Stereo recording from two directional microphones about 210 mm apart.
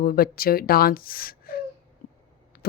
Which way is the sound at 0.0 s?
45° left (ahead or behind).